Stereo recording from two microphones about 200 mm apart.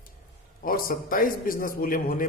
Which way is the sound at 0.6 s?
45° left (ahead or behind).